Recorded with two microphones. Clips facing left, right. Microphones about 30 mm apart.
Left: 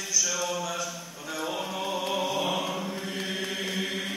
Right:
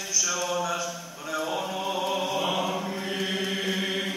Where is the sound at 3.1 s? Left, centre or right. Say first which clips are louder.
Right 6 dB; right.